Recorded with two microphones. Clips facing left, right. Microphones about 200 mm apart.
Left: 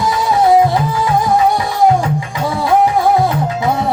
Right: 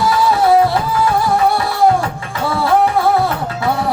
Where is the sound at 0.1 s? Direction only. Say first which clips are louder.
Left 2 dB; 20° left (ahead or behind).